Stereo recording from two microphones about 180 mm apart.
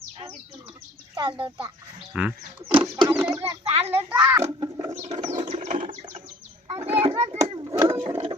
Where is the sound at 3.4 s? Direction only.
35° right (ahead or behind).